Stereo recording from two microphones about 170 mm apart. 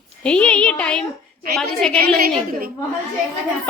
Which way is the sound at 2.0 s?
60° right (ahead or behind).